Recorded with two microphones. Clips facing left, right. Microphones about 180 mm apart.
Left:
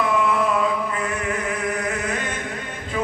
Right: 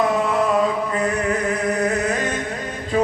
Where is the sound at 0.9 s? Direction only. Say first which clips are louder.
Right 5 dB; 40° right (ahead or behind).